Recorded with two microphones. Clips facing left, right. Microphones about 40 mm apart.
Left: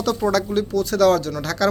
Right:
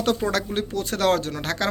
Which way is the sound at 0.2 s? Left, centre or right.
Right.